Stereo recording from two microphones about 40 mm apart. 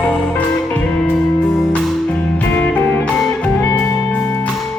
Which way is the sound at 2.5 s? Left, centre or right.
Left.